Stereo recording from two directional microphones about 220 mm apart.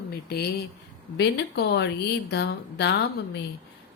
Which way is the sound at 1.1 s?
50° left (ahead or behind).